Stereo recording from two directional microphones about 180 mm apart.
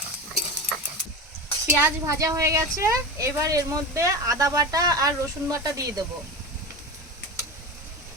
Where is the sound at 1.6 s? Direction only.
15° right (ahead or behind).